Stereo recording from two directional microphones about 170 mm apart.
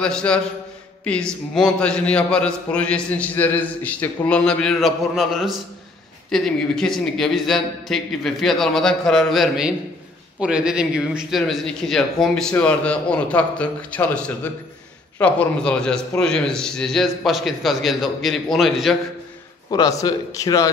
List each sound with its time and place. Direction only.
0.0 s a man's voice: 5° left (ahead or behind)
19.7 s a man's voice: 20° left (ahead or behind)